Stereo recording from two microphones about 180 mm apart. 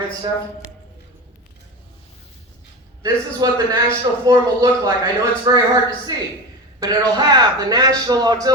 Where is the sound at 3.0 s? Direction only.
20° right (ahead or behind).